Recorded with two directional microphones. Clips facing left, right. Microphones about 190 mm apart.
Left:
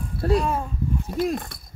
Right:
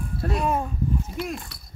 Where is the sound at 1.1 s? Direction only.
65° left (ahead or behind).